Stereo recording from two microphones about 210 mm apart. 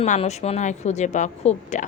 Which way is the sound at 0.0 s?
30° left (ahead or behind).